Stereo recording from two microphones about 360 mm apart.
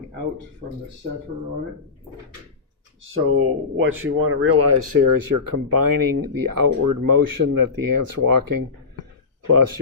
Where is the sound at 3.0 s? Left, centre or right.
Right.